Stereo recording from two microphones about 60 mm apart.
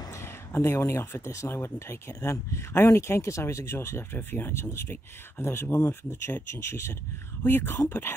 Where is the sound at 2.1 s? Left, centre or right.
Left.